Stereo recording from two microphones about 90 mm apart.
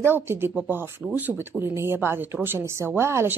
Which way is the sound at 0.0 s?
25° right (ahead or behind).